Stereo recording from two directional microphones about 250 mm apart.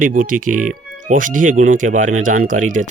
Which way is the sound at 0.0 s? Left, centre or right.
Right.